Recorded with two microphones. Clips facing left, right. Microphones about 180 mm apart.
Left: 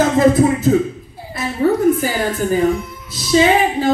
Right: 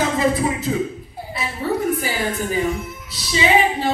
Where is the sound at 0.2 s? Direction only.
45° left (ahead or behind).